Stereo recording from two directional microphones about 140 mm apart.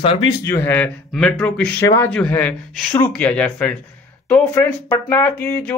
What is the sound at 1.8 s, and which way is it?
Speech, 20° left (ahead or behind).